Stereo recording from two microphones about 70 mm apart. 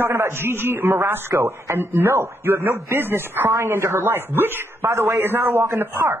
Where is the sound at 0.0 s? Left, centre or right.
Right.